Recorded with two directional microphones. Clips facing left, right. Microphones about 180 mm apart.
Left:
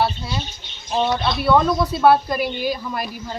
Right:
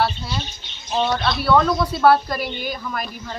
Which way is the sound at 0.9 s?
5° left (ahead or behind).